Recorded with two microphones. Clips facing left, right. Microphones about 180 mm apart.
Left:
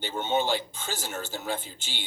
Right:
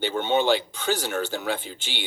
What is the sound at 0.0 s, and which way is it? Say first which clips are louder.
Speech: right 5 dB; 65° right (ahead or behind).